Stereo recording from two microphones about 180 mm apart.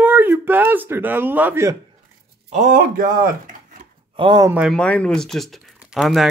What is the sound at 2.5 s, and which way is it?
Speech, 45° right (ahead or behind).